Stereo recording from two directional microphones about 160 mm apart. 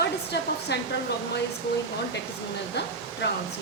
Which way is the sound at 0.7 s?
90° left.